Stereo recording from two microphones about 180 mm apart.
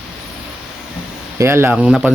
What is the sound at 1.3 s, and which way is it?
Speech, 15° right (ahead or behind).